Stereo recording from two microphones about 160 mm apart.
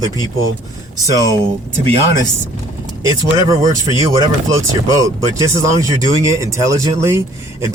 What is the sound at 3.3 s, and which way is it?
Speech, 20° right (ahead or behind).